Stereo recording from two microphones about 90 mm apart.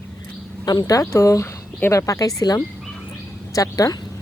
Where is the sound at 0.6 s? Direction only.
50° left (ahead or behind).